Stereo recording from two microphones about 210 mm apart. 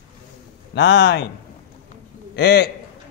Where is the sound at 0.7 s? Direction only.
55° left (ahead or behind).